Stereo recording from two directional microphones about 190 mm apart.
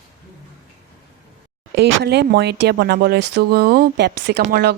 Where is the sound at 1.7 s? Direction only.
60° right (ahead or behind).